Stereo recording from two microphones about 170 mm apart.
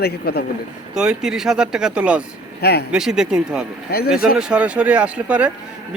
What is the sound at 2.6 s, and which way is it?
Speech, 70° left (ahead or behind).